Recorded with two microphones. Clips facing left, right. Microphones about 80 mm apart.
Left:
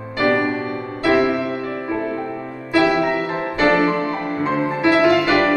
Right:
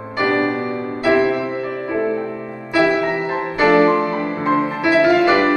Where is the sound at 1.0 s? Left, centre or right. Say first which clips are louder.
Right 1 dB; right.